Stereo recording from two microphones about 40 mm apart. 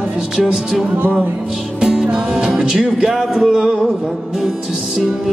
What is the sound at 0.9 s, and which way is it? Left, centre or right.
Music, right.